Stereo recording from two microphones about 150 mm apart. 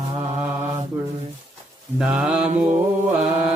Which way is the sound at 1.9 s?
5° right (ahead or behind).